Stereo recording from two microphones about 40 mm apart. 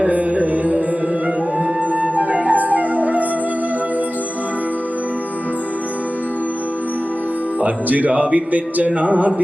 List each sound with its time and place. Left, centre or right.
0.1 s music: right
2.0 s flute: right
7.6 s speech: right